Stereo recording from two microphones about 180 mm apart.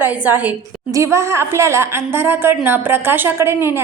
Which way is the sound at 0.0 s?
10° right (ahead or behind).